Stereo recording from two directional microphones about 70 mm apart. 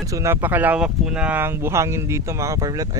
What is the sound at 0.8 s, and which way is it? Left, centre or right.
Speech, centre.